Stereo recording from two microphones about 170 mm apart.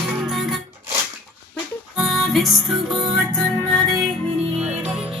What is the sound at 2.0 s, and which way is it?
Music, centre (ahead or behind).